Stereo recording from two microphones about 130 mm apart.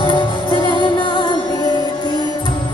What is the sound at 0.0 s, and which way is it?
Music, 35° left (ahead or behind).